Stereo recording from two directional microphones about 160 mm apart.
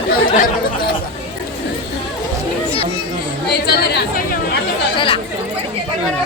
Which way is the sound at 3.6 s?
85° left.